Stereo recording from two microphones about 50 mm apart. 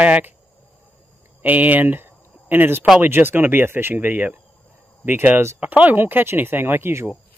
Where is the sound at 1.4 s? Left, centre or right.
Right.